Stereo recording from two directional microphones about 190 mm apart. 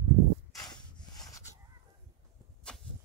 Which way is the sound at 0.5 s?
20° left (ahead or behind).